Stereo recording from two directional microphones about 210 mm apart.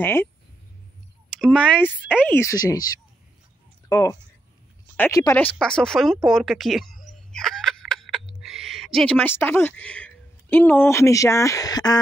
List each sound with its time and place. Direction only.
0.0 s speech: 10° left (ahead or behind)
1.4 s speech: 5° left (ahead or behind)
6.2 s a sound: centre (ahead or behind)
8.4 s speech: centre (ahead or behind); by 12.0 s 20° left (ahead or behind)